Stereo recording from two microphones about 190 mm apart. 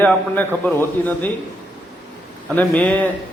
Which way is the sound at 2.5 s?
10° left (ahead or behind).